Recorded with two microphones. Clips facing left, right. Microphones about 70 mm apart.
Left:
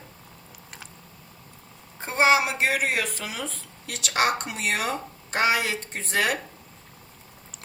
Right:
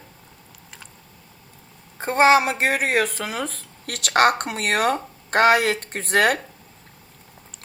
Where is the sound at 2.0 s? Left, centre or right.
Right.